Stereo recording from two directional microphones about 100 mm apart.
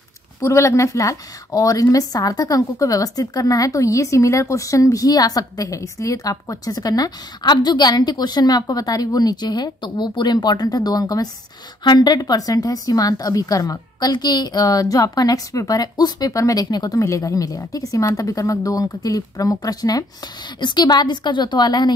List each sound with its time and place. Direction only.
0.4 s a woman's voice: 30° left (ahead or behind); by 21.9 s 45° left (ahead or behind)